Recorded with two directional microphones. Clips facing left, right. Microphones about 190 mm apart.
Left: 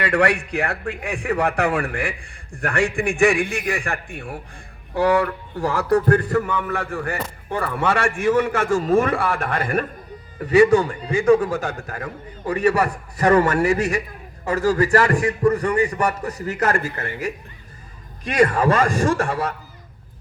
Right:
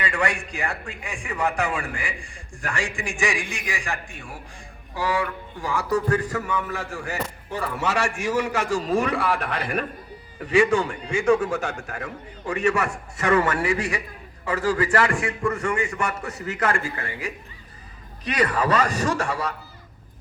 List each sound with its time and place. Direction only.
0.0 s a man's voice: 60° left (ahead or behind)